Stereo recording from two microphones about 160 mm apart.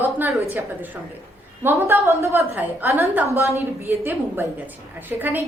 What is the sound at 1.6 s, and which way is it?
A woman's voice, 15° right (ahead or behind).